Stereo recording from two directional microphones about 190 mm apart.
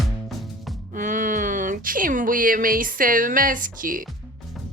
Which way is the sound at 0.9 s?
45° right (ahead or behind).